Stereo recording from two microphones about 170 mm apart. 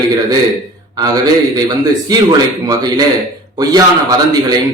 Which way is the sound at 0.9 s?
20° right (ahead or behind).